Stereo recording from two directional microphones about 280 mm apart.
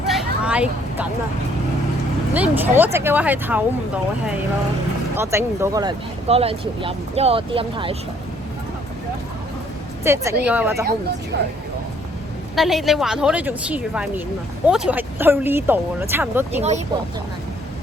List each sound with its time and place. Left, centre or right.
0.1 s vehicle: centre
2.3 s speech: centre
5.1 s speech: centre
10.0 s a woman's voice: centre
10.8 s speech: right
12.5 s a woman's voice: centre